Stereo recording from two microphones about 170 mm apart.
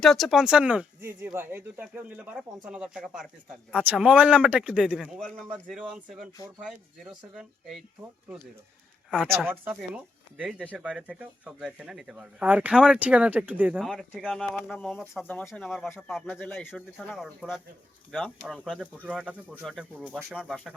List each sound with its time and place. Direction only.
0.0 s speech: centre (ahead or behind)
9.0 s speech: 5° left (ahead or behind)
9.3 s speech: 10° right (ahead or behind)
10.6 s speech: 5° left (ahead or behind)
10.8 s speech: 5° right (ahead or behind)
17.0 s speech: centre (ahead or behind)